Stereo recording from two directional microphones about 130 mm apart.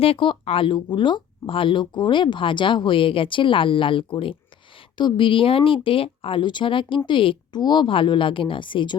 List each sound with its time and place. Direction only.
0.0 s speech: 45° left (ahead or behind)